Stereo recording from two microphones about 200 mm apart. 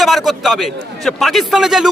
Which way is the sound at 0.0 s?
Centre (ahead or behind).